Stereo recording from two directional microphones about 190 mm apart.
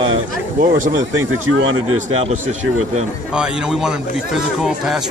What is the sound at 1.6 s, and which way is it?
Speech, 90° right.